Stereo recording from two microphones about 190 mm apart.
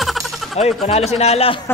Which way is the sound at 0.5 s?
35° left (ahead or behind).